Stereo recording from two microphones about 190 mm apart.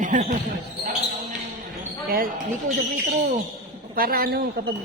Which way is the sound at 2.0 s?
50° right (ahead or behind).